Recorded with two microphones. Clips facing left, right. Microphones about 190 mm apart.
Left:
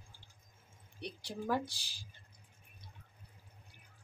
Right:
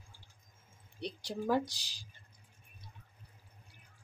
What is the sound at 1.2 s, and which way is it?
Speech, 15° right (ahead or behind).